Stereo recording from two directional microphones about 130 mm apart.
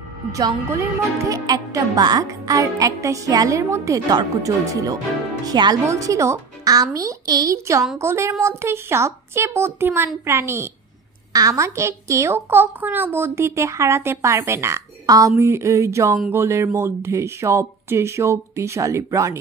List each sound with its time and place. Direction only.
0.3 s a child's voice: 25° right (ahead or behind)